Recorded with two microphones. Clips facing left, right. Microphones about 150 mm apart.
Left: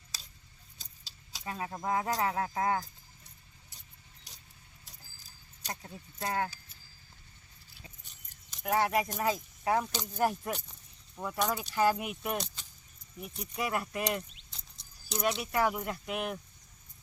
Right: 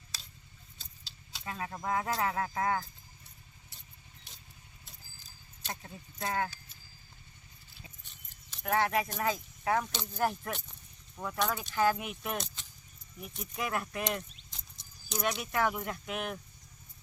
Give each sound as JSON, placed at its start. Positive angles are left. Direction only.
{"t": 0.8, "sound": "a sound", "side_deg": 40}
{"t": 1.5, "sound": "speech", "side_deg": 15}
{"t": 5.6, "sound": "speech", "side_deg": 10}
{"t": 8.6, "sound": "speech", "side_deg": 10}